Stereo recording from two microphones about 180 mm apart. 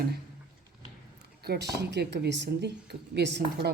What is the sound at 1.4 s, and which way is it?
Speech, 65° right (ahead or behind).